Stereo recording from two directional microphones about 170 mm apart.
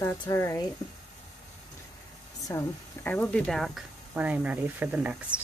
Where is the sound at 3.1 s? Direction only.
5° left (ahead or behind).